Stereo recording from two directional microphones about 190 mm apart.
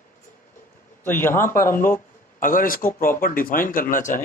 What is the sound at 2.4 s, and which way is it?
Speech, 45° left (ahead or behind).